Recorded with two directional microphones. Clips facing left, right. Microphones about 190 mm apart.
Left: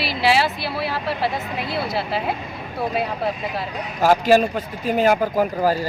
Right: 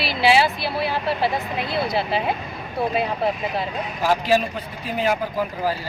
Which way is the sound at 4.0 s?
45° left (ahead or behind).